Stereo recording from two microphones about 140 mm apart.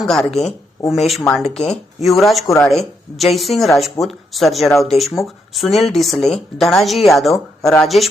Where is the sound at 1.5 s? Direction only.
5° left (ahead or behind).